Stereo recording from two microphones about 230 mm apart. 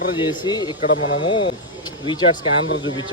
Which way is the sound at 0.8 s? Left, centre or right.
Left.